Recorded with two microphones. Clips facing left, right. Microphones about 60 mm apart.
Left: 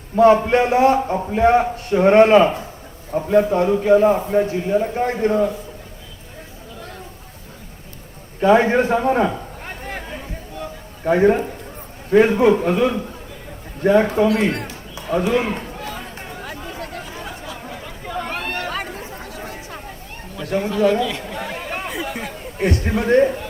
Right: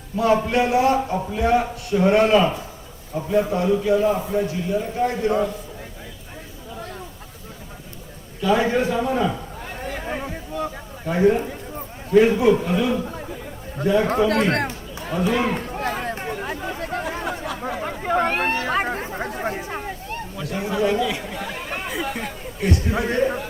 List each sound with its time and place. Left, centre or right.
0.2 s a man's voice: left
8.4 s a sound: left
11.0 s a man's voice: left
14.3 s a sound: right
16.4 s chatter: right
17.0 s chatter: right
18.9 s chatter: right
20.4 s a sound: left
20.7 s speech: centre
21.7 s chatter: centre
22.5 s speech: left